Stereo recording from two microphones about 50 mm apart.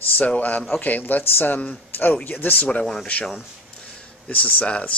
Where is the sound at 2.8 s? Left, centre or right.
Centre.